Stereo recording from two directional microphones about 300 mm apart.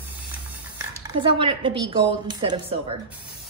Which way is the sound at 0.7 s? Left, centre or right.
Centre.